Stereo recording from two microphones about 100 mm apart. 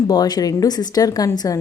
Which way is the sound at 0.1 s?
40° left (ahead or behind).